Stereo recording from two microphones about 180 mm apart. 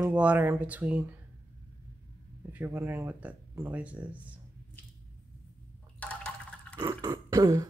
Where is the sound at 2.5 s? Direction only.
10° right (ahead or behind).